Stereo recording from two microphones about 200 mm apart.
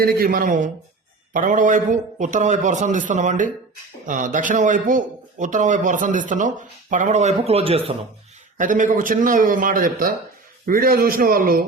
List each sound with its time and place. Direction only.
0.0 s a man's voice: 50° right (ahead or behind); by 7.9 s 30° right (ahead or behind)
8.5 s a man's voice: 40° right (ahead or behind)